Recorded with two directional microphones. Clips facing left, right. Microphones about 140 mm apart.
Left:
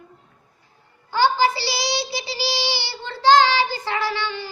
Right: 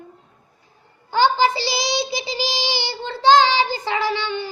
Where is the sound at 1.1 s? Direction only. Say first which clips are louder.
Right 1 dB; 20° right (ahead or behind).